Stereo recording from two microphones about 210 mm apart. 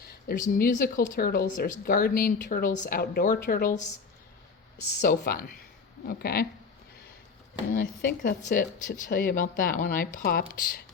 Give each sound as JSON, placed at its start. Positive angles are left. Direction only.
{"t": 0.0, "sound": "a woman's voice", "side_deg": 45}
{"t": 4.9, "sound": "a woman's voice", "side_deg": 45}
{"t": 7.7, "sound": "a woman's voice", "side_deg": 40}